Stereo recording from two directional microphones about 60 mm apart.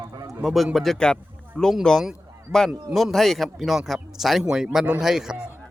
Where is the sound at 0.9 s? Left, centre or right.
Centre.